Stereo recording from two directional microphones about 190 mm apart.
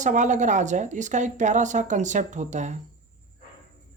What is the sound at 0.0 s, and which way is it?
Speech, 40° right (ahead or behind).